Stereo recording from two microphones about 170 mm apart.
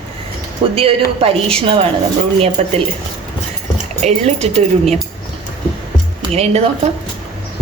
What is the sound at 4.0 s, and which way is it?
Speech, 40° right (ahead or behind).